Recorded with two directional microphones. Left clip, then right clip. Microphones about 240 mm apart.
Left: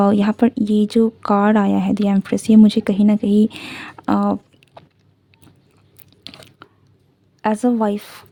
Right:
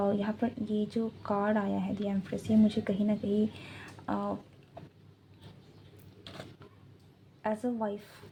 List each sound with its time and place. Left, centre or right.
0.0 s speech: left
7.4 s speech: left